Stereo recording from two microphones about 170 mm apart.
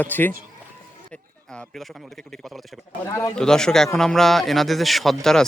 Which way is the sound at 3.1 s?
15° left (ahead or behind).